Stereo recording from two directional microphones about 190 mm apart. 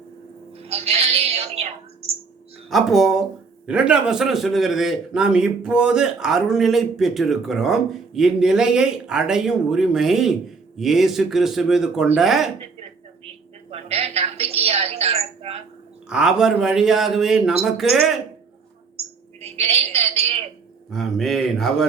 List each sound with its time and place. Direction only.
0.6 s a woman's voice: 30° right (ahead or behind)
2.6 s a man's voice: centre (ahead or behind)
13.7 s a sound: 30° right (ahead or behind)
16.0 s a man's voice: 5° right (ahead or behind)
19.4 s a sound: 30° right (ahead or behind)
20.9 s a man's voice: centre (ahead or behind)